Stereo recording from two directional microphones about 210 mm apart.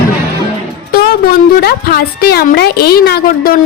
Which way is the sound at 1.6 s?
45° left (ahead or behind).